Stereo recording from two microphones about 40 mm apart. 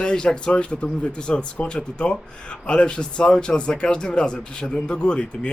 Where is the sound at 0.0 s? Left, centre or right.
Left.